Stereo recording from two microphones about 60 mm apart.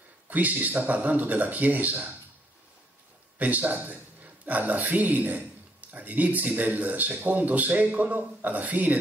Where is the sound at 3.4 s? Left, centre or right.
Right.